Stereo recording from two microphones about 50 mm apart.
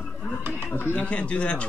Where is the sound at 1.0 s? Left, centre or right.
Left.